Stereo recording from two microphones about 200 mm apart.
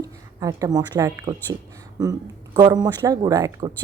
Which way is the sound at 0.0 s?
15° right (ahead or behind).